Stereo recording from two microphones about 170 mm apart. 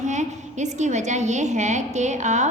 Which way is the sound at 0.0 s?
45° right (ahead or behind).